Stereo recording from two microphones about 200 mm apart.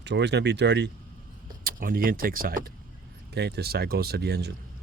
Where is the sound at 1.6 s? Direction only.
45° right (ahead or behind).